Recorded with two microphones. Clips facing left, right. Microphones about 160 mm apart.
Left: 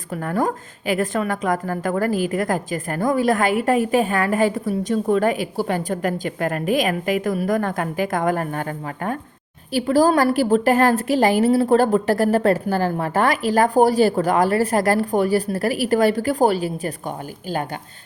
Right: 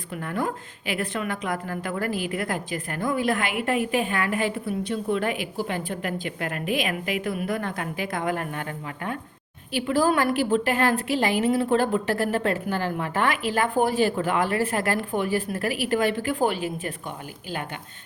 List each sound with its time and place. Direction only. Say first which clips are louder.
0.2 s a woman's voice: left 6 dB; 45° left (ahead or behind)
9.7 s a woman's voice: left 6 dB; 40° left (ahead or behind)